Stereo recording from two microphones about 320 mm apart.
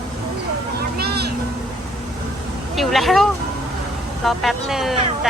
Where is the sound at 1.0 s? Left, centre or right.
Right.